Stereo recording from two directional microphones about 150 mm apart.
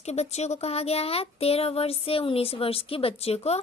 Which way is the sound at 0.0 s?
45° left (ahead or behind).